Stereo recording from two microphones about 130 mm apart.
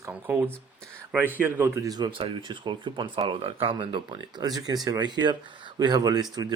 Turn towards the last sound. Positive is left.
turn(degrees=-30)  # may be behind; listen again after turning